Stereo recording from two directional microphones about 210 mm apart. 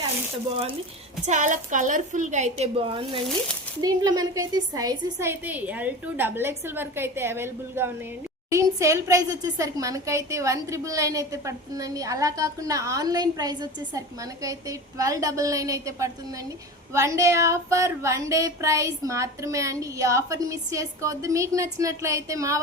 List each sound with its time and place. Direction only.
0.5 s a woman's voice: 25° right (ahead or behind)